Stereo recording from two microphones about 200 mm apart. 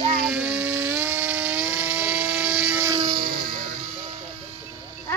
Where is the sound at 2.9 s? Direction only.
30° right (ahead or behind).